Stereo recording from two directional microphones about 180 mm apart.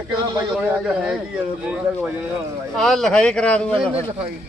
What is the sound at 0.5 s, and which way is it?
A man's voice, 5° right (ahead or behind).